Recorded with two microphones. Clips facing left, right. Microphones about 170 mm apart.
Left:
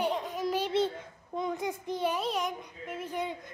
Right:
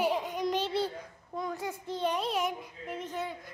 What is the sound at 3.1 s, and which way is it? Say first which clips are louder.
Speech: left 4 dB; 15° left (ahead or behind).